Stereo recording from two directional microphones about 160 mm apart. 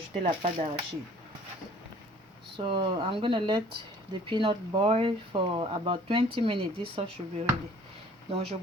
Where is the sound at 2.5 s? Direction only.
30° right (ahead or behind).